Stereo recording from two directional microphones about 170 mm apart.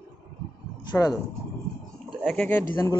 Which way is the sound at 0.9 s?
20° left (ahead or behind).